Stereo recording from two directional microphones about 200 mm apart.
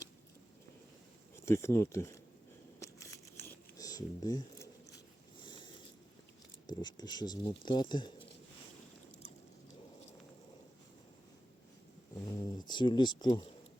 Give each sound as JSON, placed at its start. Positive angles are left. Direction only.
{"t": 1.5, "sound": "speech", "side_deg": 15}
{"t": 2.8, "sound": "a sound", "side_deg": 15}
{"t": 5.4, "sound": "zipper", "side_deg": 25}
{"t": 6.7, "sound": "speech", "side_deg": 20}
{"t": 12.2, "sound": "speech", "side_deg": 20}